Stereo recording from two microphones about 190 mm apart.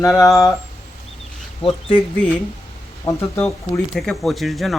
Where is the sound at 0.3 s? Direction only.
Centre (ahead or behind).